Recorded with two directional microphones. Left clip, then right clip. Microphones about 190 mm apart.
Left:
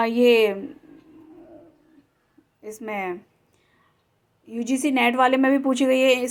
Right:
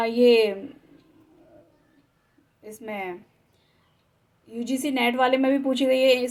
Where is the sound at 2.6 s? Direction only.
35° left (ahead or behind).